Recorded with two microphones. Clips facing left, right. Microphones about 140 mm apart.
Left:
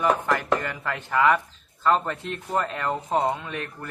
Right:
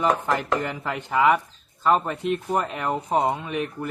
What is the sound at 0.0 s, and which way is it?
Speech, 20° right (ahead or behind).